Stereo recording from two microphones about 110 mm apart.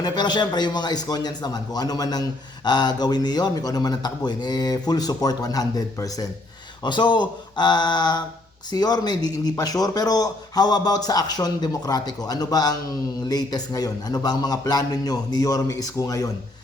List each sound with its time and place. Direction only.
0.0 s speech: 40° left (ahead or behind)
6.8 s speech: 45° left (ahead or behind)